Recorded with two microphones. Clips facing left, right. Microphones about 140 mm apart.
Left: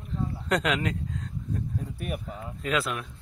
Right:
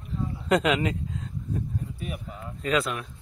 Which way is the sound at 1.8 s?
60° left (ahead or behind).